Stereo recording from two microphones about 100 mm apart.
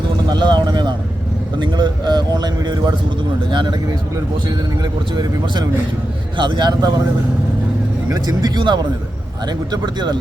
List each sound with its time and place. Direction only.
0.3 s a man's voice: 45° right (ahead or behind)
8.1 s a man's voice: 40° right (ahead or behind)